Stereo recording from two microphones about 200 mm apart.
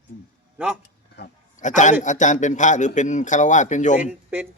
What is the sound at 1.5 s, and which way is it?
A man's voice, 40° left (ahead or behind).